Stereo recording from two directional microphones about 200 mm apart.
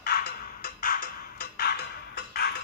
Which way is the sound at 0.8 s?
45° left (ahead or behind).